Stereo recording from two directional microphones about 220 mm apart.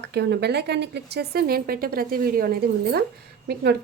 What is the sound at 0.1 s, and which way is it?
Speech, 50° right (ahead or behind).